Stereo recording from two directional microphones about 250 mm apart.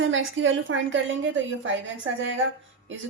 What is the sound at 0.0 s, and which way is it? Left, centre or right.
A woman's voice, right.